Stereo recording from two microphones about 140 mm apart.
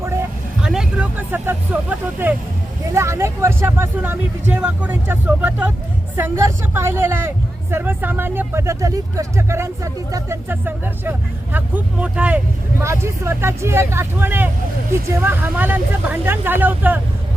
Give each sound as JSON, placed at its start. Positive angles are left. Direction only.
{"t": 0.6, "sound": "vehicle", "side_deg": -5}
{"t": 1.3, "sound": "speech", "side_deg": -15}
{"t": 12.8, "sound": "speech", "side_deg": -20}